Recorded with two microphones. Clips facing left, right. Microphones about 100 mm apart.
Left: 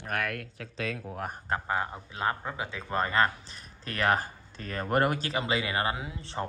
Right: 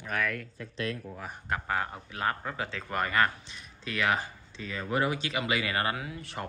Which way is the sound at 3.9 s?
40° left (ahead or behind).